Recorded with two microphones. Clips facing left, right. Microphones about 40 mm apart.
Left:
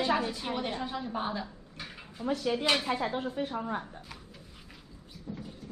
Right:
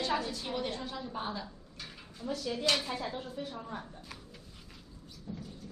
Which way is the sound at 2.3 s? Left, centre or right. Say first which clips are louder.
Left 4 dB; left.